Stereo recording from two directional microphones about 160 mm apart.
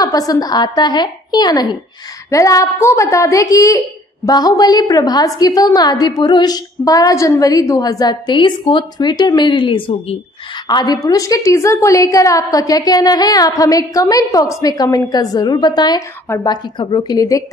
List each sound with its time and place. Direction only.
0.3 s a woman's voice: 25° left (ahead or behind)